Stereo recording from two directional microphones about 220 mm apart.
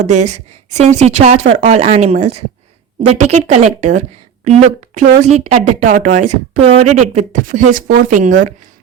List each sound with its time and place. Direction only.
0.0 s a woman's voice: 30° right (ahead or behind)